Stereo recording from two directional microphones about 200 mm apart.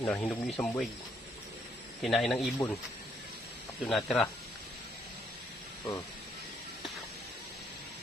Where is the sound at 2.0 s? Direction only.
Centre (ahead or behind).